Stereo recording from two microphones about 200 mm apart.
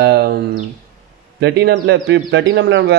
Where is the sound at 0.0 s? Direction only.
55° right (ahead or behind).